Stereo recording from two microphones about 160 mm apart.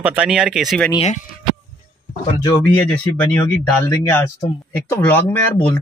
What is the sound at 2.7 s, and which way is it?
Speech, 10° left (ahead or behind).